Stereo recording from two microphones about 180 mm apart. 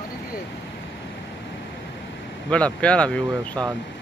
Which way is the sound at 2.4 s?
5° left (ahead or behind).